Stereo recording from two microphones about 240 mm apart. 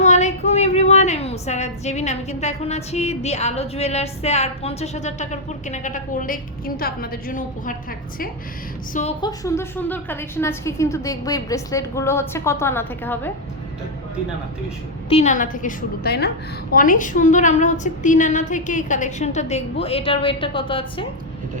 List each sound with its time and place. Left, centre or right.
0.0 s a woman's voice: left
9.2 s a woman's voice: centre
15.1 s a woman's voice: left